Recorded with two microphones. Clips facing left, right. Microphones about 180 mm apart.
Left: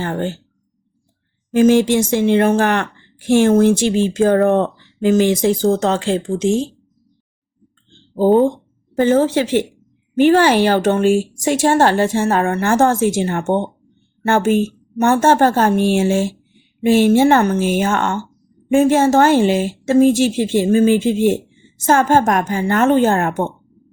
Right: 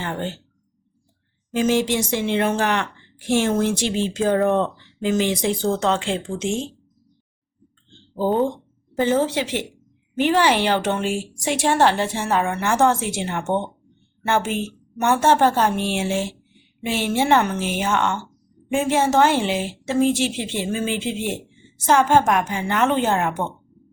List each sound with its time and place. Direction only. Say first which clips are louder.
0.0 s a woman's voice: left 6 dB; 45° left (ahead or behind)
1.5 s a woman's voice: left 8 dB; 50° left (ahead or behind)
9.0 s a woman's voice: left 6 dB; 50° left (ahead or behind)